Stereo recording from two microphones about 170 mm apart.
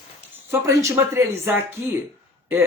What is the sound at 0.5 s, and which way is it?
Speech, 15° right (ahead or behind).